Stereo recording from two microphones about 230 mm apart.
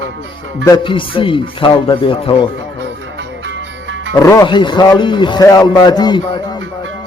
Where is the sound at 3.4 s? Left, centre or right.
Right.